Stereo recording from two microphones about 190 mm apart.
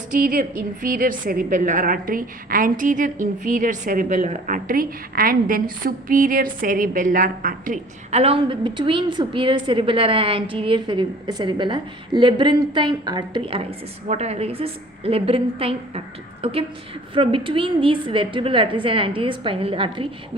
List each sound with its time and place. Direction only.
0.1 s a woman's voice: 45° right (ahead or behind)
8.2 s a woman's voice: 30° right (ahead or behind)